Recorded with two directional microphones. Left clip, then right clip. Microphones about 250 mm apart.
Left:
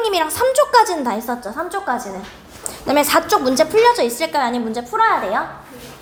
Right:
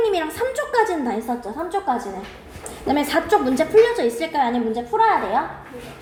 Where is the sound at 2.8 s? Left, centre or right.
Left.